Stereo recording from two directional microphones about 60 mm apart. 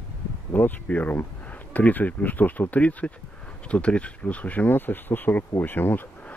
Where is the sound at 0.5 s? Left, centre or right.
Left.